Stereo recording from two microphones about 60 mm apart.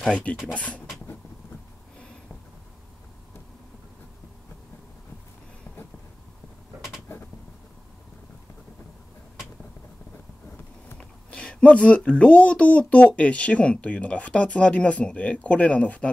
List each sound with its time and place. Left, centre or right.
0.1 s speech: left
11.0 s speech: left